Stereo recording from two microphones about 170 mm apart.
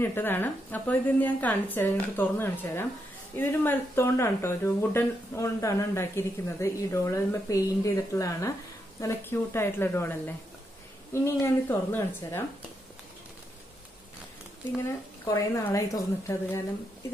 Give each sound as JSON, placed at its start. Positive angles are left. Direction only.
{"t": 0.0, "sound": "speech", "side_deg": 10}
{"t": 11.4, "sound": "speech", "side_deg": 15}
{"t": 15.2, "sound": "a woman's voice", "side_deg": 20}